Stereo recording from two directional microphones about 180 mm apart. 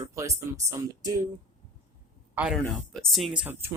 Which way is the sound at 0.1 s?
15° right (ahead or behind).